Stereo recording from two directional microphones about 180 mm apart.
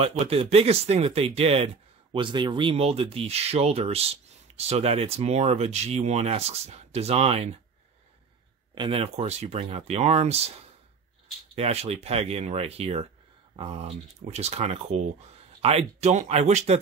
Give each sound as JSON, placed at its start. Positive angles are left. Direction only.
{"t": 0.2, "sound": "speech", "side_deg": -35}
{"t": 8.7, "sound": "speech", "side_deg": -30}